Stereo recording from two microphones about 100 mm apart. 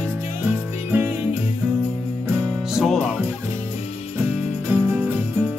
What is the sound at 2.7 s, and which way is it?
Music, centre (ahead or behind).